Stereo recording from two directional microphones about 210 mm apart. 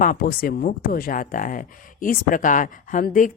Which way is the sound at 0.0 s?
40° left (ahead or behind).